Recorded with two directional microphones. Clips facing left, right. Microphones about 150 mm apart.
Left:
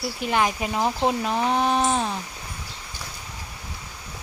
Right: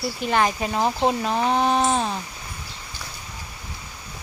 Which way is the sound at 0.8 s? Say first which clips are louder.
Right 1 dB; 20° right (ahead or behind).